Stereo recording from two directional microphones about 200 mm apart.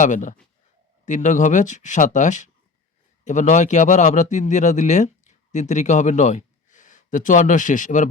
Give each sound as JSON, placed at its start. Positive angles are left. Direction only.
{"t": 0.0, "sound": "a man's voice", "side_deg": 40}